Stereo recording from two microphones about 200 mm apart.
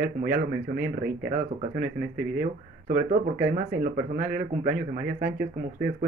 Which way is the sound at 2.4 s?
45° right (ahead or behind).